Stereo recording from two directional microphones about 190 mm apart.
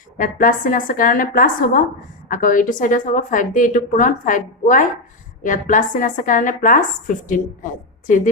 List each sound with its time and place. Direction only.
0.2 s a woman's voice: 45° left (ahead or behind)